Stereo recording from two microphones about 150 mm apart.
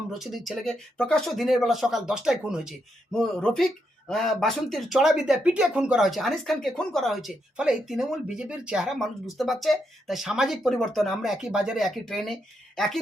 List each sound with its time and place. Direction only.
0.1 s speech: centre (ahead or behind)